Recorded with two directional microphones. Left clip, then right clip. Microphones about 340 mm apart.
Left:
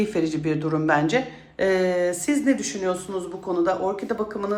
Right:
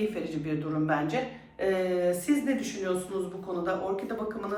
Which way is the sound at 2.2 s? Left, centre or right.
Centre.